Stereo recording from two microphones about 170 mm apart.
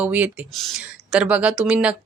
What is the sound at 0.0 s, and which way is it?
Speech, 10° right (ahead or behind).